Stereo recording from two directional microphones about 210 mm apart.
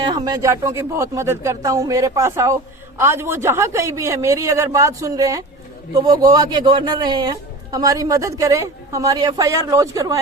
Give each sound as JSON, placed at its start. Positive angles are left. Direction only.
{"t": 0.0, "sound": "a man's voice", "side_deg": -20}